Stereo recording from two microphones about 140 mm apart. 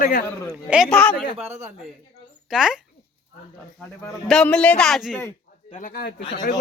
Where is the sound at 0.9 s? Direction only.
10° left (ahead or behind).